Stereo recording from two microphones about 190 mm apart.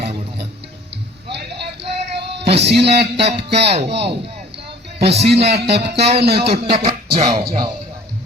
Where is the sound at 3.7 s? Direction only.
35° right (ahead or behind).